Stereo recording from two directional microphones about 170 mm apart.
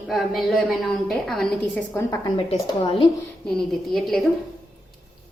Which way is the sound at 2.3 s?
30° left (ahead or behind).